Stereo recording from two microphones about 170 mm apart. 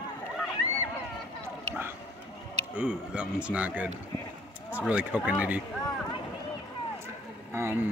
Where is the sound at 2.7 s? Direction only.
5° right (ahead or behind).